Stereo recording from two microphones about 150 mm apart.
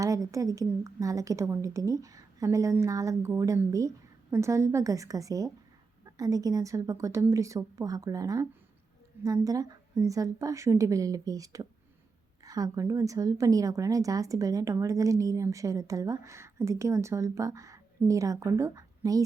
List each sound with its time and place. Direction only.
0.0 s a woman's voice: 20° right (ahead or behind)